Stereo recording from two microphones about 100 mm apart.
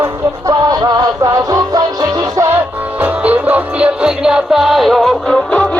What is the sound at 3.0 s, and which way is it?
Music, 15° right (ahead or behind).